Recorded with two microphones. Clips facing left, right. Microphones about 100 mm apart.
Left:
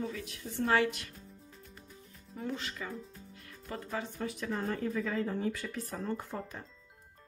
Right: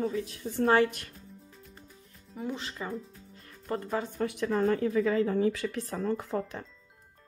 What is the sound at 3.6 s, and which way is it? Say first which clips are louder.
Speech: right 6 dB; 50° right (ahead or behind).